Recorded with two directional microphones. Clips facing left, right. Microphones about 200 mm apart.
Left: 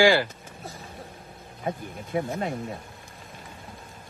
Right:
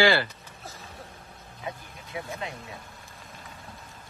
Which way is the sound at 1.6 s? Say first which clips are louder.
Left 7 dB; 50° left (ahead or behind).